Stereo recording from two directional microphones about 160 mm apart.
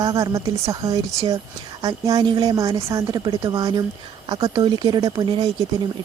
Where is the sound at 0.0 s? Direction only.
20° right (ahead or behind).